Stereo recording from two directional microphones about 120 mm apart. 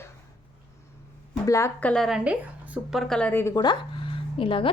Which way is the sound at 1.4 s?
25° left (ahead or behind).